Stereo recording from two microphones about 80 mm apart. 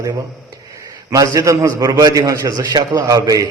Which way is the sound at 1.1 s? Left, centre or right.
Right.